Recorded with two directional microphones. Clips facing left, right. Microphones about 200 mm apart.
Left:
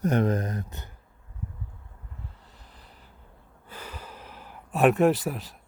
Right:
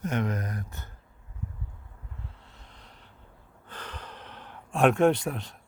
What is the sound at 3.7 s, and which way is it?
Speech, 5° left (ahead or behind).